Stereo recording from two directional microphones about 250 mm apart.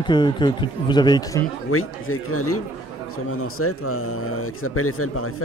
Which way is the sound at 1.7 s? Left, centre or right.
Left.